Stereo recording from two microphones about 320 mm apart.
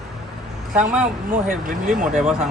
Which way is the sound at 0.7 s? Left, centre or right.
Centre.